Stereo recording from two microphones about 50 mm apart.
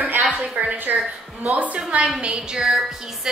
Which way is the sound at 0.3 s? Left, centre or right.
Right.